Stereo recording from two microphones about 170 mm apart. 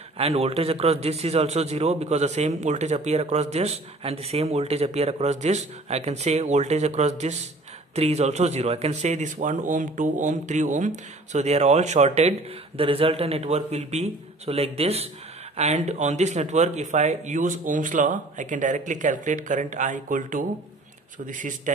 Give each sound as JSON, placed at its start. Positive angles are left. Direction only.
{"t": 0.2, "sound": "a man's voice", "side_deg": -35}